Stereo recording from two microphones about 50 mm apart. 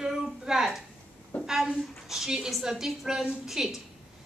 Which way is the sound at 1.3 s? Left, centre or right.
Left.